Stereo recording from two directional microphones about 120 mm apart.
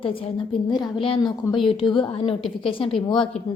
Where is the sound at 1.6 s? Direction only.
45° left (ahead or behind).